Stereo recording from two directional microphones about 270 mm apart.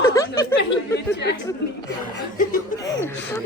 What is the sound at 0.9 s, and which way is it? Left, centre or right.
Speech, left.